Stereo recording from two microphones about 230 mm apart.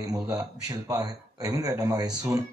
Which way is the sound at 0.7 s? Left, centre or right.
Centre.